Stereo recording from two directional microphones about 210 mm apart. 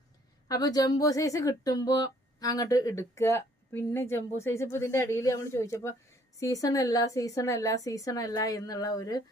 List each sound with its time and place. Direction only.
0.4 s speech: 15° left (ahead or behind)